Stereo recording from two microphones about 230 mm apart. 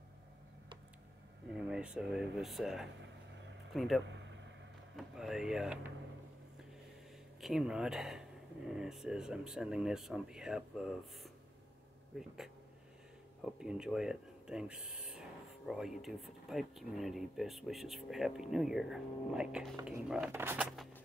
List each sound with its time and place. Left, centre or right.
1.7 s speech: centre
4.0 s a sound: right
4.9 s speech: centre
7.3 s speech: centre
12.1 s speech: centre
13.4 s speech: centre
20.7 s a sound: centre